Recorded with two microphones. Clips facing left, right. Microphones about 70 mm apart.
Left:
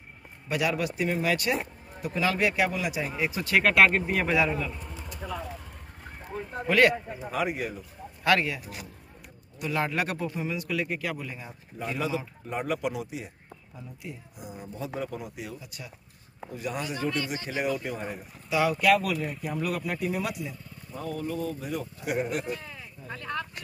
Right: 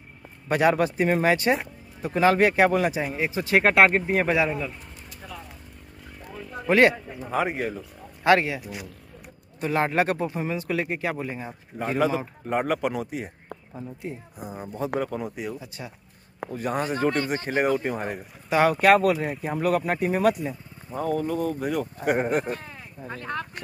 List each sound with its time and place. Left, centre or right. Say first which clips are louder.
0.5 s speech: right 7 dB; right
6.2 s a sound: left 2 dB; left
6.7 s speech: right 3 dB; right
9.6 s speech: right 5 dB; right
13.7 s speech: right 6 dB; right
15.6 s speech: right 5 dB; right
16.5 s speech: right 6 dB; right
21.9 s speech: right 5 dB; right